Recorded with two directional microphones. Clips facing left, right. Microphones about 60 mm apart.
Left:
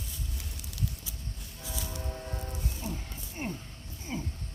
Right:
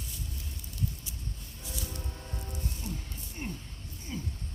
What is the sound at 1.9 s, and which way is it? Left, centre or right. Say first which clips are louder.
Music: left 4 dB; left.